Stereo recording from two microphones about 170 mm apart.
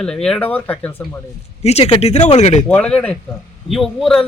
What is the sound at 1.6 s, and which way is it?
Speech, 35° left (ahead or behind).